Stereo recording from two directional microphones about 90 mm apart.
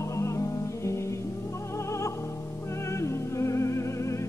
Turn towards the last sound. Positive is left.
turn(degrees=35)  # may be behind; listen again after turning